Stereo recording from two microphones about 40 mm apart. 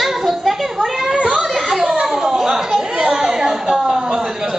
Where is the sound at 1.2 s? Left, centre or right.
Right.